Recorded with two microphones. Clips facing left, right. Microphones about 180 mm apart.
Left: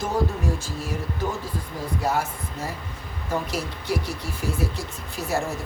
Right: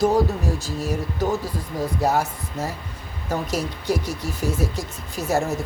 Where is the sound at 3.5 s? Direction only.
40° right (ahead or behind).